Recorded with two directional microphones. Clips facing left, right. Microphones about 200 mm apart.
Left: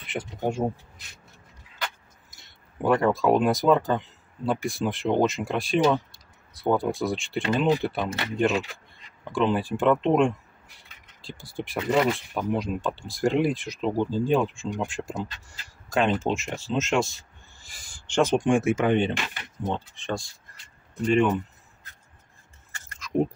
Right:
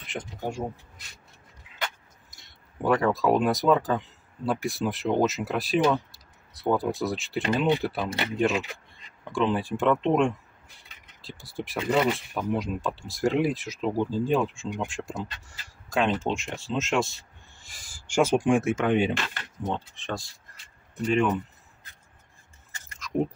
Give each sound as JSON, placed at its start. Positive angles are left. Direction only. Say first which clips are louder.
{"t": 0.0, "sound": "a sound", "louder": "left 3 dB", "side_deg": 5}
{"t": 0.4, "sound": "speech", "louder": "left 6 dB", "side_deg": 20}
{"t": 2.3, "sound": "speech", "louder": "left 1 dB", "side_deg": 0}
{"t": 9.3, "sound": "speech", "louder": "left 1 dB", "side_deg": 0}
{"t": 19.1, "sound": "speech", "louder": "even", "side_deg": 15}
{"t": 19.6, "sound": "speech", "louder": "left 1 dB", "side_deg": 0}
{"t": 23.0, "sound": "chewing", "louder": "left 2 dB", "side_deg": 0}